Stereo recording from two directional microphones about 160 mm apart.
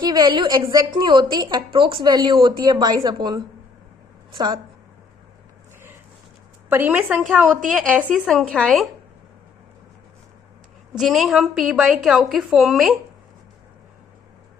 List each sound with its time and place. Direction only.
0.0 s a woman's voice: 25° right (ahead or behind)
6.7 s a woman's voice: 10° right (ahead or behind)
10.9 s a woman's voice: centre (ahead or behind)